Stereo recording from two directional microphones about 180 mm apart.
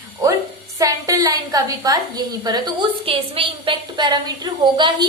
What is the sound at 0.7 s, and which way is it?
A woman's voice, 20° right (ahead or behind).